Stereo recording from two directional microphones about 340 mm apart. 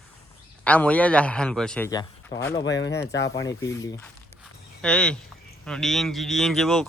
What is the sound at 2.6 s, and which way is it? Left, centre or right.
Speech, left.